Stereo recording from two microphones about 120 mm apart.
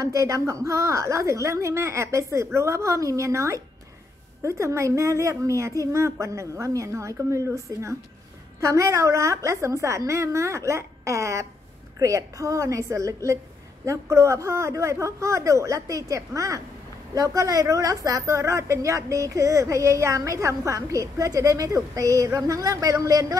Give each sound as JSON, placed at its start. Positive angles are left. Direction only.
{"t": 0.0, "sound": "a woman's voice", "side_deg": -25}